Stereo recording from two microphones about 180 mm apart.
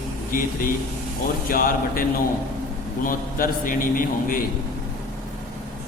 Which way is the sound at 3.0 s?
50° left (ahead or behind).